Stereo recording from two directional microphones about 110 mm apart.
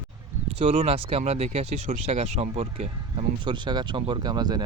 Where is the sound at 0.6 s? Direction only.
60° right (ahead or behind).